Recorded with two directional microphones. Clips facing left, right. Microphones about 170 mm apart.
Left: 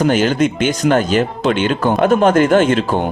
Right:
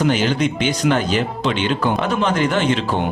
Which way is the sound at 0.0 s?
45° left (ahead or behind).